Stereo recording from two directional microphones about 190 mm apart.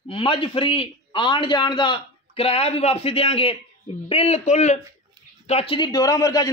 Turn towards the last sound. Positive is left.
turn(degrees=20)  # may be behind; listen again after turning